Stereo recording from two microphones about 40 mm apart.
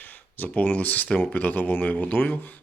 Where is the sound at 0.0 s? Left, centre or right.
Left.